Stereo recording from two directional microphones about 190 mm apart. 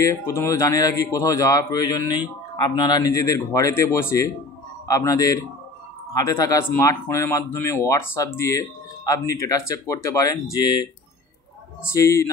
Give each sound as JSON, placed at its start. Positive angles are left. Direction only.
{"t": 0.0, "sound": "a man's voice", "side_deg": 15}
{"t": 11.9, "sound": "speech", "side_deg": 15}